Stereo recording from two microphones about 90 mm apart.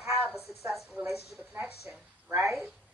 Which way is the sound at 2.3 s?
30° right (ahead or behind).